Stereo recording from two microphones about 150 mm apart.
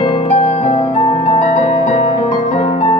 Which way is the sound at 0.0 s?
40° left (ahead or behind).